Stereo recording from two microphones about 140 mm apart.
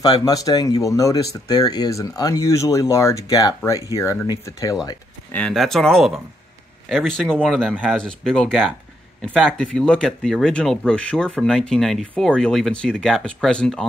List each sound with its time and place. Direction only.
0.0 s speech: 25° left (ahead or behind)
5.3 s speech: 5° left (ahead or behind)